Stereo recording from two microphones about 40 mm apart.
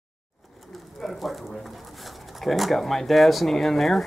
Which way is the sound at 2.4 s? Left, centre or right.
Centre.